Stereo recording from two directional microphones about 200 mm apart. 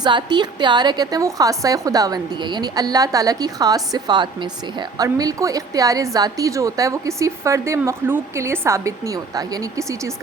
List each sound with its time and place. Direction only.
0.0 s a woman's voice: 20° right (ahead or behind)